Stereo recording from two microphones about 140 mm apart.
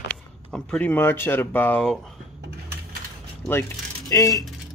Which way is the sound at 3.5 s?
20° left (ahead or behind).